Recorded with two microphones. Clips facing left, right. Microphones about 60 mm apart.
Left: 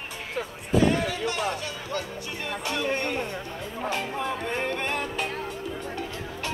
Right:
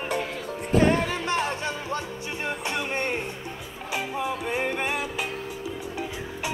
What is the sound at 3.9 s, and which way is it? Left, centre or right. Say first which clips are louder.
Music: right 2 dB; centre.